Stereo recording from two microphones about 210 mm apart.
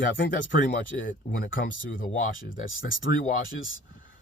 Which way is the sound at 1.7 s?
65° left (ahead or behind).